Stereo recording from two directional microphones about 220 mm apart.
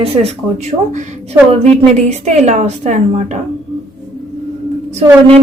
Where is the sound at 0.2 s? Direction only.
25° right (ahead or behind).